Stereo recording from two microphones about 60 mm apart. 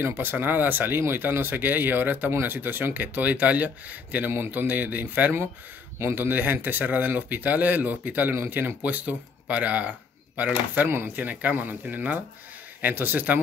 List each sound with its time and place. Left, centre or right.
0.0 s speech: right